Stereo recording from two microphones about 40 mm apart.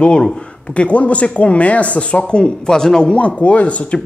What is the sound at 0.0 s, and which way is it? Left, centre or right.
Speech, left.